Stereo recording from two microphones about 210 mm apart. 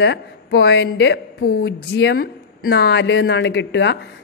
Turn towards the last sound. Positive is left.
turn(degrees=55)  # may be behind; listen again after turning